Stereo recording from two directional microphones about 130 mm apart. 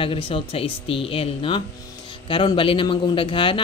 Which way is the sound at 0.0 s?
45° left (ahead or behind).